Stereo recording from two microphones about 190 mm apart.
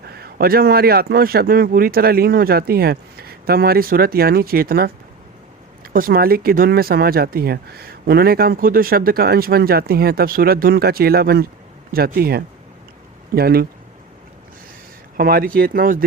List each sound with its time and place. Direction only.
0.2 s speech: 50° right (ahead or behind)
5.9 s speech: 50° right (ahead or behind)
15.2 s speech: 50° right (ahead or behind)